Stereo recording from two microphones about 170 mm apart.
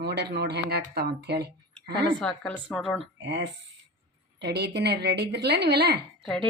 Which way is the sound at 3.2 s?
90° right.